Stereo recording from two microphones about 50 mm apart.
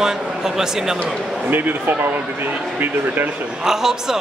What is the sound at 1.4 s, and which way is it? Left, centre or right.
Speech, right.